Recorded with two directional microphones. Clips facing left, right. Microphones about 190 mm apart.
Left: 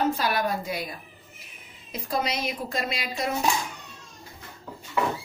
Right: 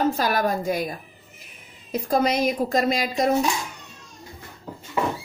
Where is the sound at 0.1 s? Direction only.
45° right (ahead or behind).